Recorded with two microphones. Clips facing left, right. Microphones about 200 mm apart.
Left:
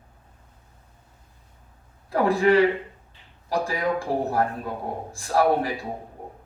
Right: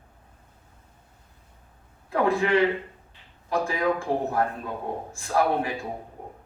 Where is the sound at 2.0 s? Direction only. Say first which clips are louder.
Left 3 dB; 35° left (ahead or behind).